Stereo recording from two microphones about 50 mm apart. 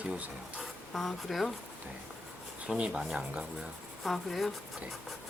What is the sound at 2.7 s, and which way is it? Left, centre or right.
Speech, right.